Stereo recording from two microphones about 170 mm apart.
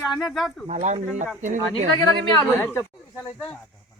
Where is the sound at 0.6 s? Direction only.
45° right (ahead or behind).